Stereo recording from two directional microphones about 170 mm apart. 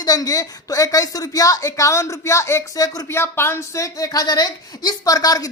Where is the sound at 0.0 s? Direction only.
20° left (ahead or behind).